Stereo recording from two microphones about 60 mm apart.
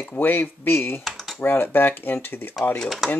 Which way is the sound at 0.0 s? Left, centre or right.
Left.